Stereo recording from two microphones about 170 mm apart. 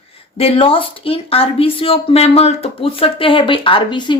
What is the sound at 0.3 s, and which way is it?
Speech, 35° left (ahead or behind).